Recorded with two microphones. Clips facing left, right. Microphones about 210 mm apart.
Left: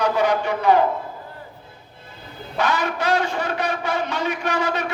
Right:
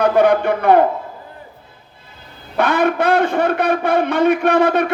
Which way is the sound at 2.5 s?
55° right (ahead or behind).